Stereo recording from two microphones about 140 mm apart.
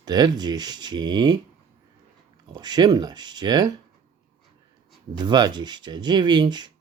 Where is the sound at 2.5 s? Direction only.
30° right (ahead or behind).